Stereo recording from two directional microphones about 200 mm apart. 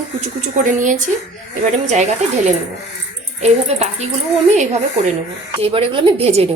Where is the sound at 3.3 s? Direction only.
35° right (ahead or behind).